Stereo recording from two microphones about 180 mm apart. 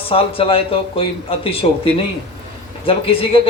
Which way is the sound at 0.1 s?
30° left (ahead or behind).